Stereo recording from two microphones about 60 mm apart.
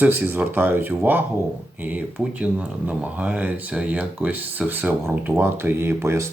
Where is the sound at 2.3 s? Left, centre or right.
Right.